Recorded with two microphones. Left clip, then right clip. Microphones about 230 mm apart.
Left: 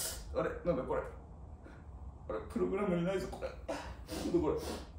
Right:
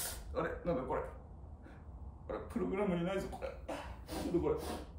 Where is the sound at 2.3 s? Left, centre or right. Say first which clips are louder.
Left 3 dB; centre.